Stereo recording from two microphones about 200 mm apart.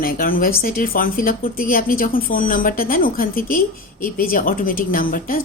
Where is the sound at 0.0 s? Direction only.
45° left (ahead or behind).